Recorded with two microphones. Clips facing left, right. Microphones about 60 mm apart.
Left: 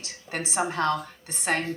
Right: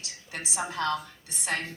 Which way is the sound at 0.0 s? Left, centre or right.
Left.